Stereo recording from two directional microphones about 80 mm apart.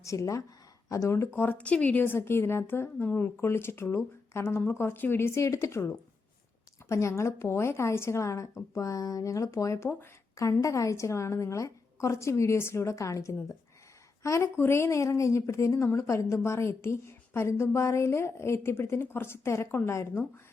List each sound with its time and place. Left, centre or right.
0.0 s a woman's voice: left
1.4 s a woman's voice: centre